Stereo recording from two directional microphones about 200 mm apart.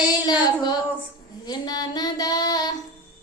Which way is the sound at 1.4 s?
20° left (ahead or behind).